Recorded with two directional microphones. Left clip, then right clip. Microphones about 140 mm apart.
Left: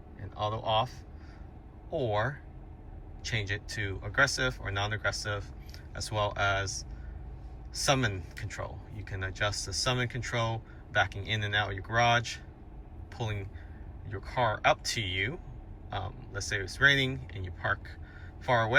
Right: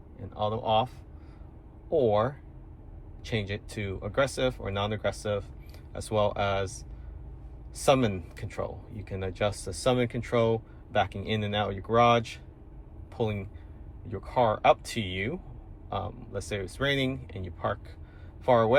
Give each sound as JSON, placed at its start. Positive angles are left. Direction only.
{"t": 0.3, "sound": "speech", "side_deg": -25}
{"t": 1.9, "sound": "speech", "side_deg": -30}
{"t": 14.1, "sound": "speech", "side_deg": -25}